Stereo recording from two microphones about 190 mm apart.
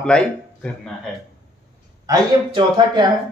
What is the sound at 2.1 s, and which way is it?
Speech, 20° right (ahead or behind).